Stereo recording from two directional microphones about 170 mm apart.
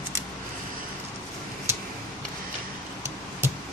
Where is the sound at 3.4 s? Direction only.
15° right (ahead or behind).